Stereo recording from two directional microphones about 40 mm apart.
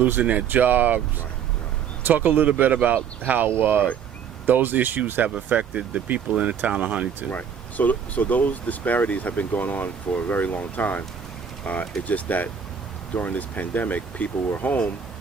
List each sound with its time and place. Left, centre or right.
0.0 s speech: right
2.0 s speech: right
3.4 s speech: right
5.5 s speech: right
7.3 s speech: left